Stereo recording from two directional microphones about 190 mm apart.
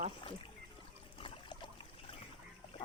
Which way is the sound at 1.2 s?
25° left (ahead or behind).